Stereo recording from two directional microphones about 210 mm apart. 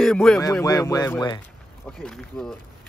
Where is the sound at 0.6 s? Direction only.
20° left (ahead or behind).